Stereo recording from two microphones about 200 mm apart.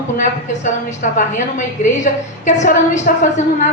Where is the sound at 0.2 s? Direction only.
40° left (ahead or behind).